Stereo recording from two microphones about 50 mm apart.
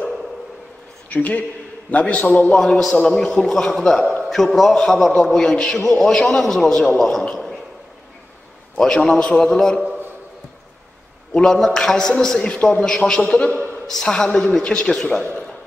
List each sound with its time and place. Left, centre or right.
1.1 s a man's voice: left; by 7.2 s centre
8.7 s a woman's voice: centre
11.3 s a woman's voice: centre